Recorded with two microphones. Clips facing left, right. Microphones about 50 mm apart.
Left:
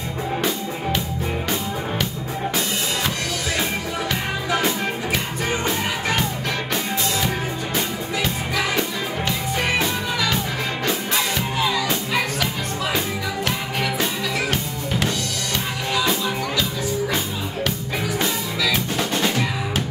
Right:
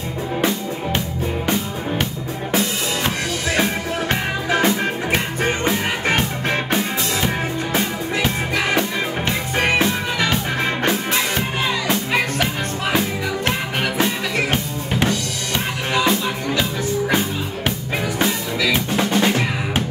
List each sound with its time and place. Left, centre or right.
4.1 s music: right
6.0 s music: right
11.9 s music: right
13.5 s music: right
18.2 s music: right